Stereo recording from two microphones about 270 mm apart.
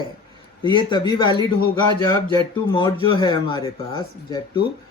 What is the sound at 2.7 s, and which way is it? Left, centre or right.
Speech, centre.